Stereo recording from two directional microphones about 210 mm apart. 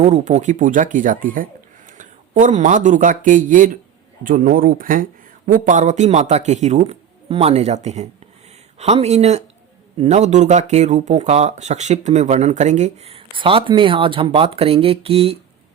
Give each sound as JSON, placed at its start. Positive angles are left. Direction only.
{"t": 0.0, "sound": "a man's voice", "side_deg": -30}